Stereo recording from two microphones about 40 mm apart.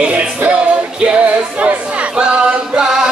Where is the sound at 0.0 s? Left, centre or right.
Right.